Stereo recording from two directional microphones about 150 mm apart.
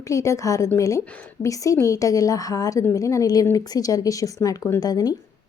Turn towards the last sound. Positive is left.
turn(degrees=25)  # may be behind; listen again after turning